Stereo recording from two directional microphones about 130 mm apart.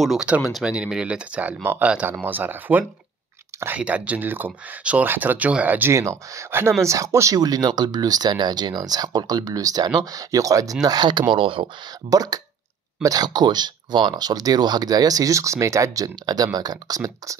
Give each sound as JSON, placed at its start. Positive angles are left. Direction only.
{"t": 0.0, "sound": "speech", "side_deg": -5}
{"t": 12.1, "sound": "speech", "side_deg": -30}